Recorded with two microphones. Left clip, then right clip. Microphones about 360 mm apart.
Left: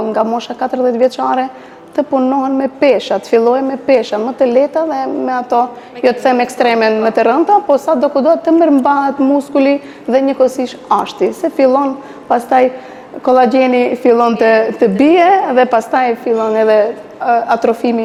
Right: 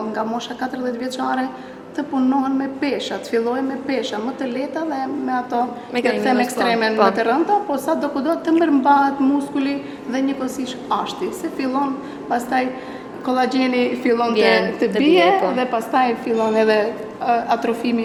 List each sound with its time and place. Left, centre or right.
0.1 s a woman's voice: left
9.6 s a woman's voice: left
12.3 s a woman's voice: left
13.2 s a woman's voice: left
17.2 s a woman's voice: left